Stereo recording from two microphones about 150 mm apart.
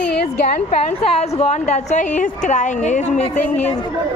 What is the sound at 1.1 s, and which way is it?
A woman's voice, 45° left (ahead or behind).